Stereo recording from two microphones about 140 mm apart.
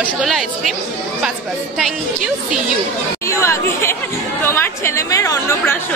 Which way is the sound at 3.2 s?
20° left (ahead or behind).